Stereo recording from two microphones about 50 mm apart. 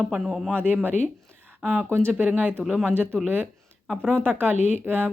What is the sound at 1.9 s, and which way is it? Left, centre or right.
Speech, right.